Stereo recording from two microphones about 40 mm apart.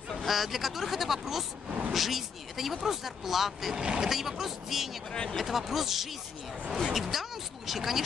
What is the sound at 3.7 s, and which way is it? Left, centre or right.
Speech, right.